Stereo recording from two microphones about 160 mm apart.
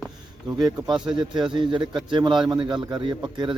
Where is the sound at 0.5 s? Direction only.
30° right (ahead or behind).